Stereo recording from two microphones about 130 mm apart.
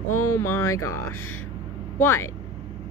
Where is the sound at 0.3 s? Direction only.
20° left (ahead or behind).